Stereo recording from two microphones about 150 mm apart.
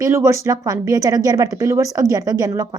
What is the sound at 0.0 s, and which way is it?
Speech, 20° right (ahead or behind).